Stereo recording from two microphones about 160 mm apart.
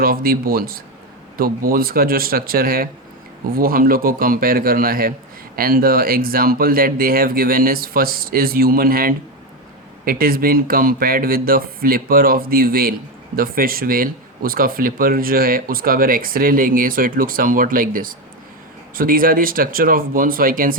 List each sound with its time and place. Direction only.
0.0 s speech: 65° right (ahead or behind)